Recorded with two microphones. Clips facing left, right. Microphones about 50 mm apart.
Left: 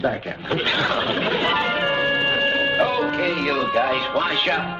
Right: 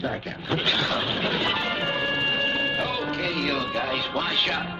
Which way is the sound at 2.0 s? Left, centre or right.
Centre.